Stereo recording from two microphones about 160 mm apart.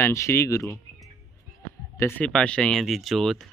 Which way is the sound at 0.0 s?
15° left (ahead or behind).